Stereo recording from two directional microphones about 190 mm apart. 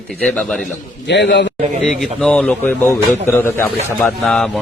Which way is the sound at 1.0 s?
65° left (ahead or behind).